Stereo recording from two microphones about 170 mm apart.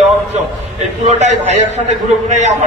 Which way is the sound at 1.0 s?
45° right (ahead or behind).